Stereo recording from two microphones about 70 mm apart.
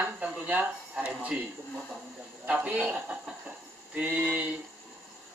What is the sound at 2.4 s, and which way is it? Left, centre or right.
Speech, centre.